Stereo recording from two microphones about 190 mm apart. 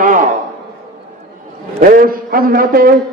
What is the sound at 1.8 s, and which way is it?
A man's voice, 50° right (ahead or behind).